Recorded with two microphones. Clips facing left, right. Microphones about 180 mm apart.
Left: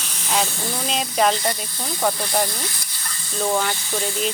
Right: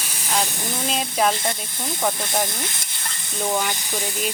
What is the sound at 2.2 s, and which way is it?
Sizzle, 20° right (ahead or behind).